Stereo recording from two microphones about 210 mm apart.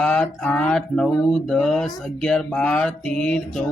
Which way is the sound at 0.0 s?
5° left (ahead or behind).